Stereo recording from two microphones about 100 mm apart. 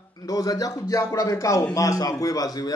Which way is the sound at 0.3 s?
35° left (ahead or behind).